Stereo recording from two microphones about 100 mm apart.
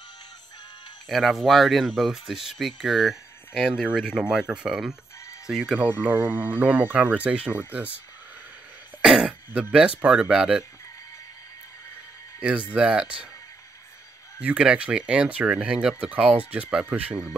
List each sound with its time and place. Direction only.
1.0 s speech: centre (ahead or behind); by 7.9 s 15° right (ahead or behind)
9.0 s throat clearing: 5° right (ahead or behind)
9.5 s speech: 10° right (ahead or behind)
12.4 s speech: 10° right (ahead or behind)
14.4 s speech: 10° right (ahead or behind)